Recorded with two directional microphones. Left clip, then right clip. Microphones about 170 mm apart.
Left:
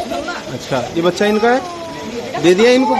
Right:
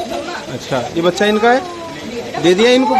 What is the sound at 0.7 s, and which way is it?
Speech, centre (ahead or behind).